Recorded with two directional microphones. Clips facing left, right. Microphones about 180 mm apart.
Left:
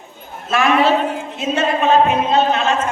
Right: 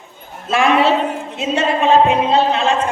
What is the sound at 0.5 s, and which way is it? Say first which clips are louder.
Speech: right 1 dB; 25° right (ahead or behind).